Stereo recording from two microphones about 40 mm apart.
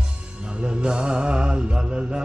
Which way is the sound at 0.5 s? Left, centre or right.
Right.